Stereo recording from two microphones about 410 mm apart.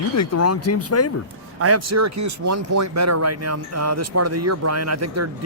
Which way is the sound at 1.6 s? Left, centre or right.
Right.